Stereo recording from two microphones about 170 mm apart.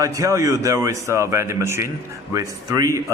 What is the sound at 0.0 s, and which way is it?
A man's voice, 20° right (ahead or behind).